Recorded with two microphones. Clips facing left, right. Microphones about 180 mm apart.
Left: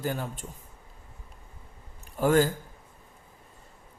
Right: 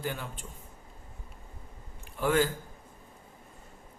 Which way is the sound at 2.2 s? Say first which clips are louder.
Left 4 dB; 45° left (ahead or behind).